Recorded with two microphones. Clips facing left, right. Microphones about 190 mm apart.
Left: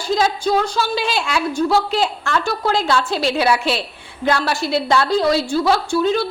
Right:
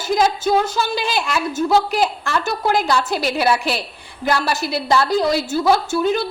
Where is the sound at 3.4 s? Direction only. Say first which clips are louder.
Left 1 dB; centre (ahead or behind).